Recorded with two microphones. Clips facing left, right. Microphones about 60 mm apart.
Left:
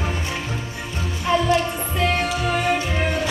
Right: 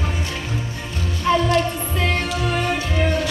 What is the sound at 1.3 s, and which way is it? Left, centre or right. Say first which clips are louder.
Music: right 1 dB; centre.